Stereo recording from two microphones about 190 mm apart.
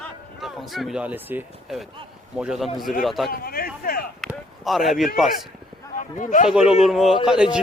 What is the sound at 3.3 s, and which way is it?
Speech, 50° left (ahead or behind).